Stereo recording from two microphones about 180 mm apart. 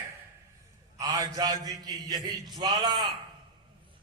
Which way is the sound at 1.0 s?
20° right (ahead or behind).